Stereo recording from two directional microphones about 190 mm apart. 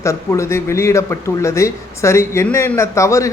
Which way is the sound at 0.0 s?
15° left (ahead or behind).